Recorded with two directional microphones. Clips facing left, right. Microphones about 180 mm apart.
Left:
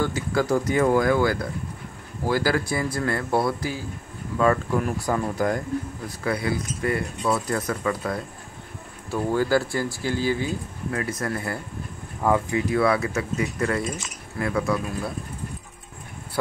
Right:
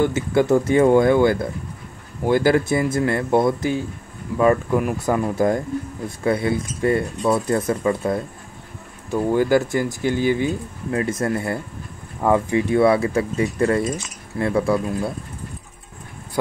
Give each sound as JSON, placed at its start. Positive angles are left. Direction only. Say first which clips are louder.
{"t": 0.0, "sound": "speech", "louder": "right 6 dB", "side_deg": -25}